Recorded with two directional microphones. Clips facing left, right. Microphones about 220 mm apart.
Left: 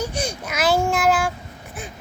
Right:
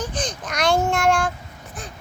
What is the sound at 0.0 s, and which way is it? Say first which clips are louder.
Babbling: left 2 dB; 10° left (ahead or behind).